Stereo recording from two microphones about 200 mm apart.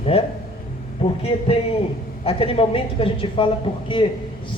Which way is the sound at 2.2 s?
30° left (ahead or behind).